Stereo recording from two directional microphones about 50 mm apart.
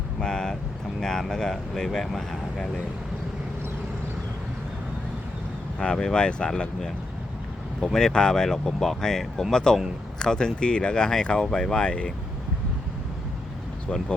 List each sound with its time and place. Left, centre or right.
0.2 s vehicle: centre
0.9 s speech: centre
5.8 s speech: centre
7.9 s speech: centre
13.9 s speech: left